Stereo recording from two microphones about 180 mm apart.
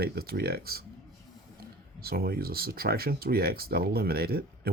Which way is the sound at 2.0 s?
60° right (ahead or behind).